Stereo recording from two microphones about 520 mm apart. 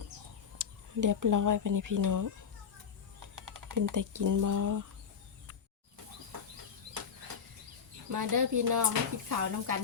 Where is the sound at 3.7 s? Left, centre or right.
Right.